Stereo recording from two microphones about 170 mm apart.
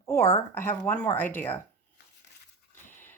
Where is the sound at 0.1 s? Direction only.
15° left (ahead or behind).